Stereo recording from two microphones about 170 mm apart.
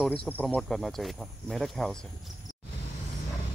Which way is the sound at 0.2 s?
10° left (ahead or behind).